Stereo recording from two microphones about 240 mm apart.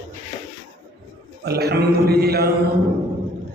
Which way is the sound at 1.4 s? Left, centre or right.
Right.